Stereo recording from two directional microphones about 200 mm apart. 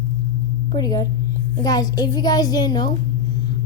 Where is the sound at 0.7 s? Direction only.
20° left (ahead or behind).